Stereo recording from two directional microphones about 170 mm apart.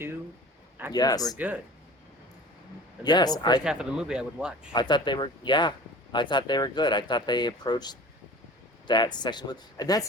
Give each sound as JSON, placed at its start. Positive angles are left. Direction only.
{"t": 0.9, "sound": "speech", "side_deg": 25}
{"t": 1.4, "sound": "speech", "side_deg": -10}
{"t": 3.0, "sound": "speech", "side_deg": 25}
{"t": 3.6, "sound": "speech", "side_deg": -5}
{"t": 4.7, "sound": "speech", "side_deg": 25}